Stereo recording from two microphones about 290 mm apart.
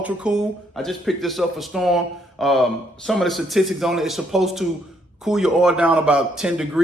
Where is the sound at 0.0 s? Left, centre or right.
Centre.